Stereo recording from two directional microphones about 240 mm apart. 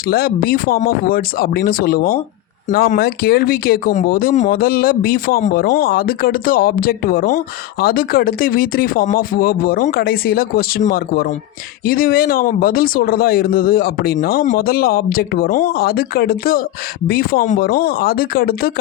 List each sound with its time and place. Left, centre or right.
0.1 s speech: left